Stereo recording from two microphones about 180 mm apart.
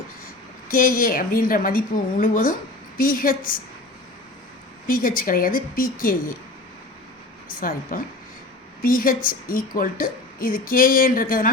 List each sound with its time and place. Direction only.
0.7 s a woman's voice: 50° left (ahead or behind)
4.9 s a woman's voice: 50° left (ahead or behind)
7.4 s a woman's voice: 50° left (ahead or behind)